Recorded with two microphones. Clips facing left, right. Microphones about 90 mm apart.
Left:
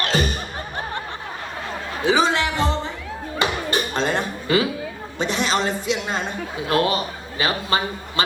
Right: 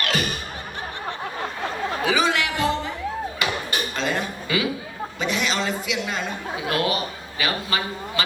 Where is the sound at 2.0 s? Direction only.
30° left (ahead or behind).